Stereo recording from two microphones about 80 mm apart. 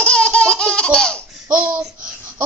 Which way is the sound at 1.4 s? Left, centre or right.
Centre.